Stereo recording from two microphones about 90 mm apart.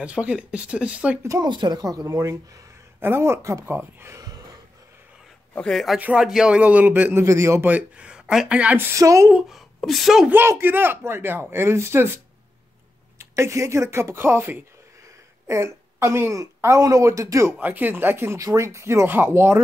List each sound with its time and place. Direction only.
0.0 s speech: 15° right (ahead or behind)
1.4 s speech: 55° right (ahead or behind)
3.0 s a man's voice: 25° right (ahead or behind)
5.7 s speech: centre (ahead or behind)
5.9 s a man's voice: 15° right (ahead or behind); by 7.6 s 35° right (ahead or behind)
7.6 s speech: 15° right (ahead or behind)
8.9 s speech: 35° right (ahead or behind)
9.5 s a woman's voice: centre (ahead or behind)
10.3 s a man's voice: 25° right (ahead or behind)
13.2 s speech: 30° right (ahead or behind)
17.6 s a man's voice: 20° right (ahead or behind)